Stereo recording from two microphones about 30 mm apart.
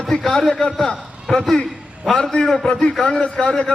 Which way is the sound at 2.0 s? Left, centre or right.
Centre.